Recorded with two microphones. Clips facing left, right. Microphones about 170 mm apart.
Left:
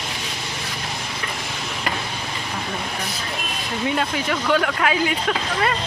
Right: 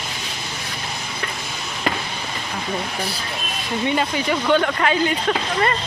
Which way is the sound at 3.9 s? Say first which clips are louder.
Right 2 dB; centre (ahead or behind).